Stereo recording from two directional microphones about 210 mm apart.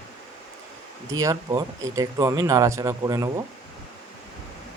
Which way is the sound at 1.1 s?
15° right (ahead or behind).